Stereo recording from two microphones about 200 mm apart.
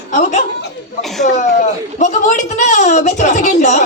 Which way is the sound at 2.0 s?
35° left (ahead or behind).